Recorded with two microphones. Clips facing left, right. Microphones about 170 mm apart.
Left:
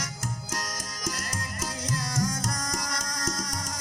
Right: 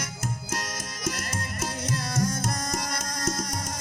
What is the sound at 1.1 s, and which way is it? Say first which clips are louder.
Music: right 3 dB; 25° right (ahead or behind).